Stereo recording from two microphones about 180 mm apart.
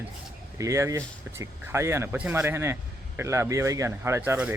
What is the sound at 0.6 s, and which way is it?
Speech, 15° right (ahead or behind).